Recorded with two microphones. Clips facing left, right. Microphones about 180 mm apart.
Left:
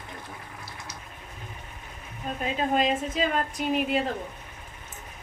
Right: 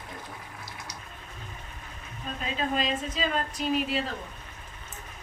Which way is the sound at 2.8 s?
55° left (ahead or behind).